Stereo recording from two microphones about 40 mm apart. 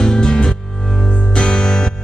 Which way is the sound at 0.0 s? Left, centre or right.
Centre.